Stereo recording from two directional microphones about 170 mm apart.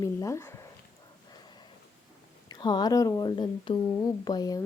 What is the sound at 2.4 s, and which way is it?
Speech, 25° left (ahead or behind).